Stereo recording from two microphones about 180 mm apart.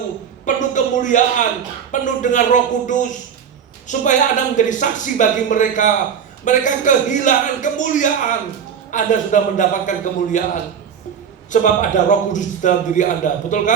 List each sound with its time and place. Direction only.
0.4 s a man's voice: 45° left (ahead or behind)
11.5 s a man's voice: 45° left (ahead or behind)